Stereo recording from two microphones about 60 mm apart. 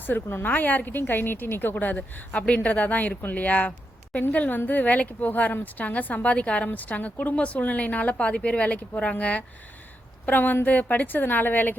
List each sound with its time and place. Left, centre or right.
0.0 s a woman's voice: left